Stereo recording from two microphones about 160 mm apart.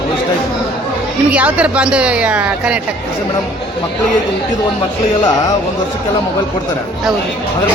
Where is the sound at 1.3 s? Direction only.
10° right (ahead or behind).